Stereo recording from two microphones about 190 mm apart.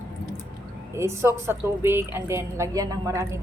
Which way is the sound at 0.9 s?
15° right (ahead or behind).